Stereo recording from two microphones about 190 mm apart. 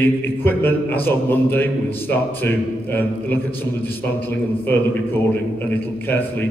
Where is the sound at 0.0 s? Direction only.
10° left (ahead or behind).